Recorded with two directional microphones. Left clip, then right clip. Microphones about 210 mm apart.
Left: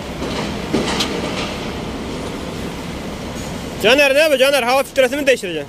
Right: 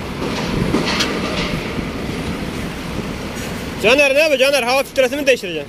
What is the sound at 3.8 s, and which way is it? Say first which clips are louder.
Speech: even; 10° left (ahead or behind).